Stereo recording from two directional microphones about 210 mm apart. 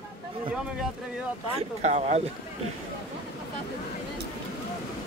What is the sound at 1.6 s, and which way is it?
Speech, 30° right (ahead or behind).